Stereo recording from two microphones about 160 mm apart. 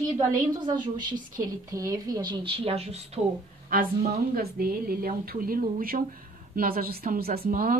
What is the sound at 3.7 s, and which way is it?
Speech, 65° right (ahead or behind).